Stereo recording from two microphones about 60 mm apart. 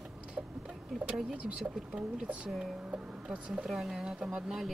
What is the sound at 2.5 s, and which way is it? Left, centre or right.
Speech, centre.